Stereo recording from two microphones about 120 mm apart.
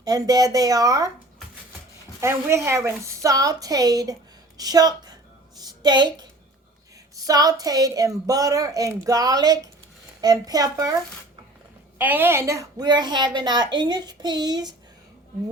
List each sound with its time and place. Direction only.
0.0 s a woman's voice: 30° right (ahead or behind)
2.2 s a woman's voice: 25° right (ahead or behind)
5.5 s a sound: 35° right (ahead or behind)
7.2 s a woman's voice: 30° right (ahead or behind)
11.9 s a woman's voice: 15° right (ahead or behind); by 14.8 s 35° right (ahead or behind)